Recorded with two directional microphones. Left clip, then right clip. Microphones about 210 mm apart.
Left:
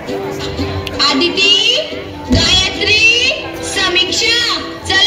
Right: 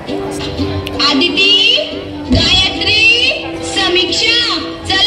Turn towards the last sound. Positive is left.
turn(degrees=30)  # may be behind; listen again after turning